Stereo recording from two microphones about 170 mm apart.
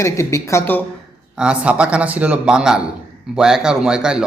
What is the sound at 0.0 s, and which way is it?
Speech, 15° left (ahead or behind).